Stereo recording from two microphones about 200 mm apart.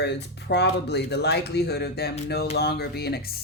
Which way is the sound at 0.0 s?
55° left (ahead or behind).